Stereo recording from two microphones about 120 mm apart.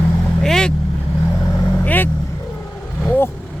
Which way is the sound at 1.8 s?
15° left (ahead or behind).